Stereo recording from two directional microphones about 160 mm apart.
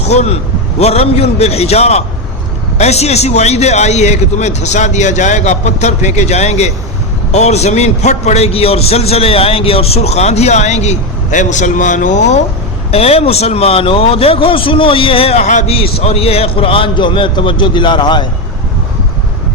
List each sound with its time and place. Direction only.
0.1 s a man's voice: 45° left (ahead or behind)